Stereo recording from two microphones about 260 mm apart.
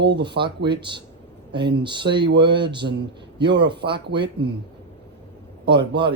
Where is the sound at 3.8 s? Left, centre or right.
Right.